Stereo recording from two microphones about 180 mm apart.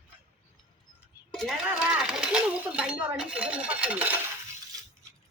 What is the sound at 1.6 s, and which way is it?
Speech, 5° right (ahead or behind).